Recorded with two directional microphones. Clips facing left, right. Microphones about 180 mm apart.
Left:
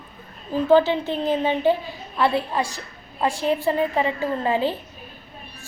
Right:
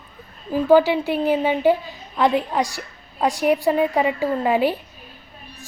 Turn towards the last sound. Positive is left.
turn(degrees=-15)  # may be behind; listen again after turning